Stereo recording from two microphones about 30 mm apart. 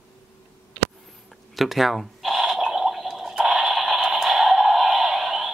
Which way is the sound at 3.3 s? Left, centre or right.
Right.